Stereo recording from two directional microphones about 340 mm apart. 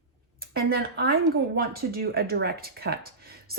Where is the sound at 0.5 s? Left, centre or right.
Right.